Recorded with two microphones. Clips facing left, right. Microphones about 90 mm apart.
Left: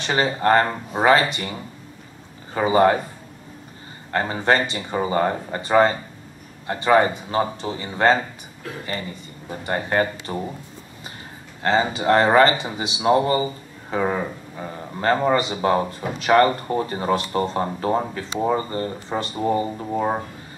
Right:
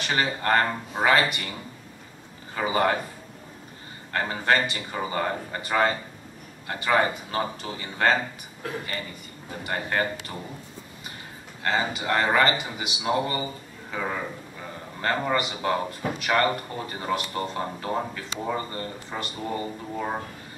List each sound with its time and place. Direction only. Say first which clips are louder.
0.0 s speech: left 5 dB; 30° left (ahead or behind)
4.1 s speech: left 4 dB; 30° left (ahead or behind)
9.5 s speech: left 5 dB; 30° left (ahead or behind)
11.6 s speech: left 7 dB; 30° left (ahead or behind)